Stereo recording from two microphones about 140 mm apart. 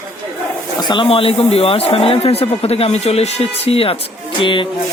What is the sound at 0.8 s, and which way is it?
A man's voice, 35° left (ahead or behind).